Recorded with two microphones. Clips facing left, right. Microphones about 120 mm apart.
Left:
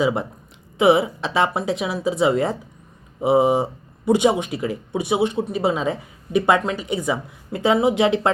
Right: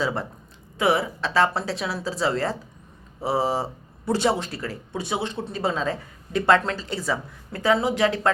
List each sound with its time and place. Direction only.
0.0 s speech: 15° left (ahead or behind)